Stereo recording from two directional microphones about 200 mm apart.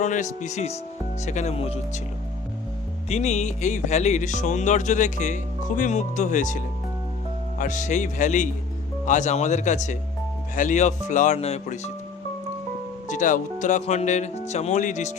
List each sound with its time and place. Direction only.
0.0 s speech: 35° left (ahead or behind)
3.1 s speech: 35° left (ahead or behind)
7.6 s speech: 40° left (ahead or behind)
13.1 s speech: 40° left (ahead or behind)